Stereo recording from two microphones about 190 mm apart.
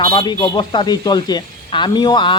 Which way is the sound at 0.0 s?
25° left (ahead or behind).